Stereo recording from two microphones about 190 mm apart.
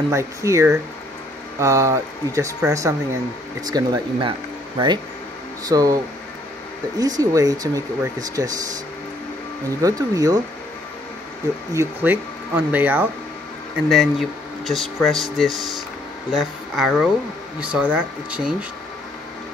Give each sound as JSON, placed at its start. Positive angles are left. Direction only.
{"t": 0.1, "sound": "speech", "side_deg": -15}
{"t": 7.0, "sound": "speech", "side_deg": -20}
{"t": 9.8, "sound": "speech", "side_deg": -20}
{"t": 11.7, "sound": "speech", "side_deg": -15}